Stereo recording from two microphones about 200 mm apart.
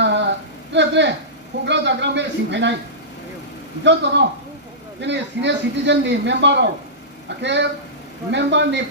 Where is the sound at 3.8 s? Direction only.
60° right (ahead or behind).